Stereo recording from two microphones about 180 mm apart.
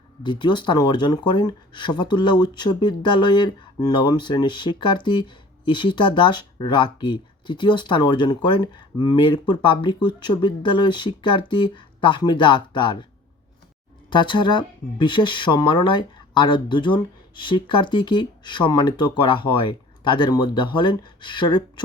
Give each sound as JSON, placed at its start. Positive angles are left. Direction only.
{"t": 0.2, "sound": "speech", "side_deg": 25}
{"t": 14.1, "sound": "speech", "side_deg": 25}